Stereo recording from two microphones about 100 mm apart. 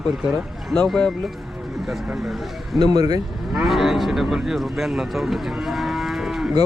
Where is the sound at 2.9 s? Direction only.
40° right (ahead or behind).